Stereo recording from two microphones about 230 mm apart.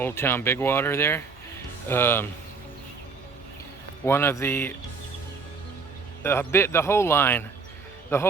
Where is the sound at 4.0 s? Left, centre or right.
Centre.